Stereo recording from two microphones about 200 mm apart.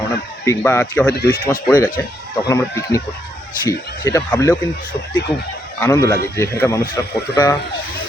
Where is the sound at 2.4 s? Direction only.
15° left (ahead or behind).